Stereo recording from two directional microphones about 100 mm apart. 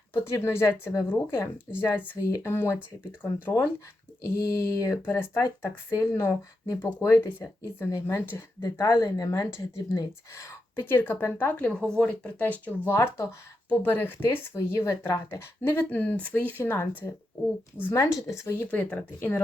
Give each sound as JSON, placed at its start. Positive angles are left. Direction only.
{"t": 0.1, "sound": "speech", "side_deg": 25}
{"t": 8.8, "sound": "speech", "side_deg": 35}
{"t": 17.9, "sound": "speech", "side_deg": 30}